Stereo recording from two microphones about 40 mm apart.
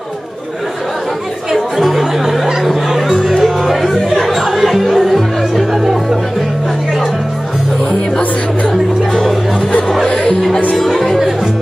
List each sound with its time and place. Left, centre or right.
1.5 s music: centre
8.6 s music: centre
9.7 s music: left
10.8 s music: centre